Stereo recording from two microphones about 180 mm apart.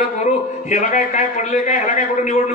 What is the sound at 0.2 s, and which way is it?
A man's voice, 40° left (ahead or behind).